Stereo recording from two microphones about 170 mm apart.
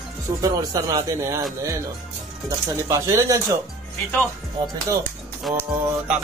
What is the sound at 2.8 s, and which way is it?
Speech, 20° right (ahead or behind).